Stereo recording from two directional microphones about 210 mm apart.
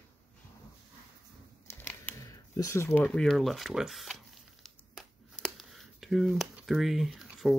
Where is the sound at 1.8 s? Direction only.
10° left (ahead or behind).